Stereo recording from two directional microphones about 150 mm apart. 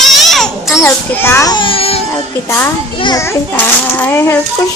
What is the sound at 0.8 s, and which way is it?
A child's voice, 15° left (ahead or behind).